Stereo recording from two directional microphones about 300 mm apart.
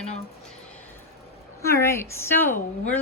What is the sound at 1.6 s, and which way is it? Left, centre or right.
Speech, centre.